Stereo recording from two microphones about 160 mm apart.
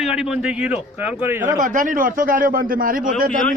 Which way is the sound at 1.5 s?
55° right (ahead or behind).